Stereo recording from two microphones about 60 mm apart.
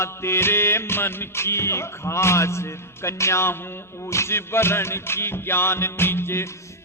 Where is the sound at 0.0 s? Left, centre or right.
Left.